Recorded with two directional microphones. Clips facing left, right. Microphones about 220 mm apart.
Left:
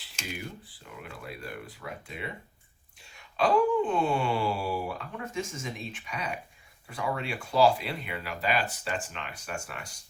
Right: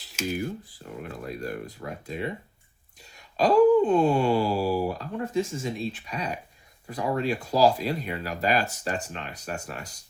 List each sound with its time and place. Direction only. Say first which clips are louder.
0.3 s wail: right 9 dB; 40° right (ahead or behind)